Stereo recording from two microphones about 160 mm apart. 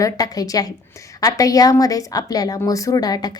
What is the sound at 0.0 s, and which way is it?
A woman's voice, 20° left (ahead or behind).